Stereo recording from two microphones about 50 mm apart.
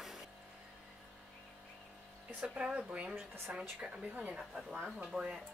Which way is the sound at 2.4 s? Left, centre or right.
Right.